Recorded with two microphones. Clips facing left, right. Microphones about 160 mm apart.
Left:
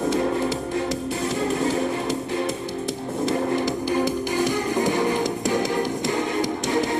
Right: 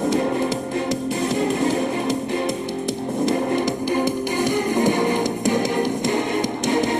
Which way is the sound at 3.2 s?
20° right (ahead or behind).